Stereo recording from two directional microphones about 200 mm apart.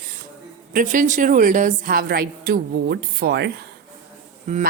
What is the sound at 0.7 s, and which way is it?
Speech, 40° right (ahead or behind).